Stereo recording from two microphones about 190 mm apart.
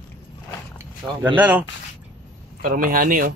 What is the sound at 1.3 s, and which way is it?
Chuckle, 10° right (ahead or behind).